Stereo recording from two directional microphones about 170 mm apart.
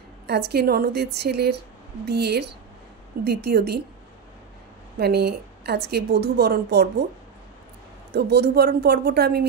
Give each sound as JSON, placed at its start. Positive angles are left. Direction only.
{"t": 0.3, "sound": "a woman's voice", "side_deg": -70}
{"t": 4.9, "sound": "a woman's voice", "side_deg": -70}
{"t": 8.1, "sound": "a woman's voice", "side_deg": -75}